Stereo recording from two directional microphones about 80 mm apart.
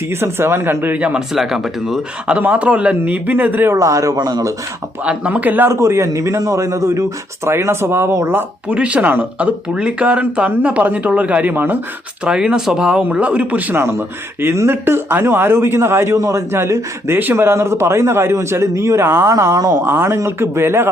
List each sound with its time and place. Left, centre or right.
0.1 s a man's voice: right
0.9 s speech: centre
1.3 s speech: centre
2.2 s a man's voice: centre
3.7 s speech: right
5.0 s a man's voice: centre
5.7 s a man's voice: right
8.7 s speech: centre
12.2 s a man's voice: centre; by 16.1 s right
16.1 s speech: right
16.5 s a man's voice: right
19.5 s speech: right
19.8 s a man's voice: right